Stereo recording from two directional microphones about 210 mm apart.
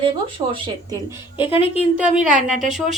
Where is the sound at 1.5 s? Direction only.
25° left (ahead or behind).